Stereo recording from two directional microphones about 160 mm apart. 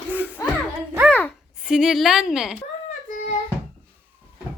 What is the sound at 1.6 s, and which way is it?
Speech, 5° right (ahead or behind).